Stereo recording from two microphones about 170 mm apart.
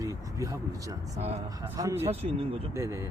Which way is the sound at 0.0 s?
20° right (ahead or behind).